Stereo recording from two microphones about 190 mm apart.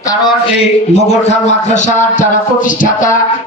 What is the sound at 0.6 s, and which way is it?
A man's voice, 35° left (ahead or behind).